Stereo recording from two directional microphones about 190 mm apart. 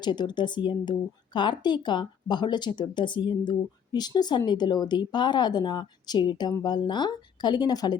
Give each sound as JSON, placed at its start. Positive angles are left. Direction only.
{"t": 0.0, "sound": "speech", "side_deg": 25}